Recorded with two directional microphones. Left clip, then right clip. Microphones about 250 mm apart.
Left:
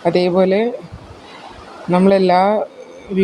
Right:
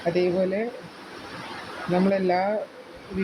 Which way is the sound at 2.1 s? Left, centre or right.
Left.